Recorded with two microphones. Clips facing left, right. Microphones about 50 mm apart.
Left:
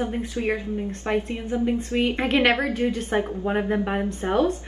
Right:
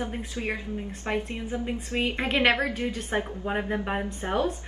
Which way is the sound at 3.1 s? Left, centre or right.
Left.